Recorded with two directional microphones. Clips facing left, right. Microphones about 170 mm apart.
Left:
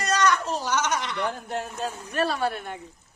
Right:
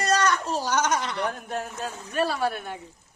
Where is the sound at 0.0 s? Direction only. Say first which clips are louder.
Even; 30° right (ahead or behind).